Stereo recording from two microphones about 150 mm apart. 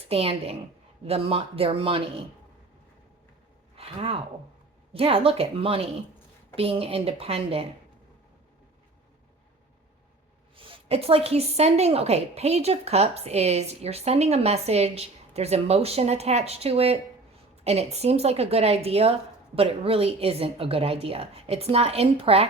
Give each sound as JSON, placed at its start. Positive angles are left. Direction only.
{"t": 0.1, "sound": "a woman's voice", "side_deg": -40}
{"t": 3.8, "sound": "a woman's voice", "side_deg": -40}
{"t": 10.6, "sound": "a woman's voice", "side_deg": -40}